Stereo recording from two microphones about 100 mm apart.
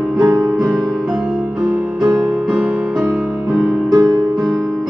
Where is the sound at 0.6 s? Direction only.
Centre (ahead or behind).